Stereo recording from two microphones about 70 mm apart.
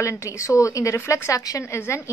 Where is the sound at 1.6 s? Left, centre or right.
Left.